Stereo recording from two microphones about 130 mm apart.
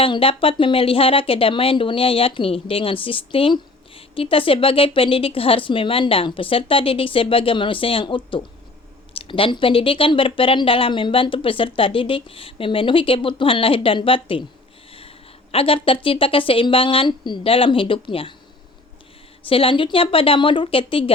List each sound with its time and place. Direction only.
0.0 s speech: 45° left (ahead or behind)
15.5 s speech: 45° left (ahead or behind)
19.5 s speech: 45° left (ahead or behind)